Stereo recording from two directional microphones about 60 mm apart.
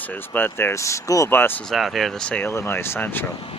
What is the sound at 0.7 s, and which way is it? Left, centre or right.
Speech, left.